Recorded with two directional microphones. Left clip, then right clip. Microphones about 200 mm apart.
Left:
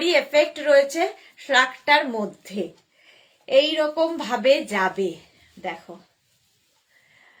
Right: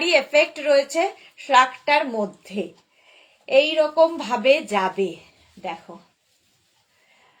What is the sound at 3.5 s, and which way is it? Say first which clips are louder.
A woman's voice: right 1 dB; 20° left (ahead or behind).